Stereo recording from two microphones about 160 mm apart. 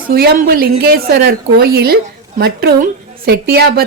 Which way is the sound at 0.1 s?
80° right.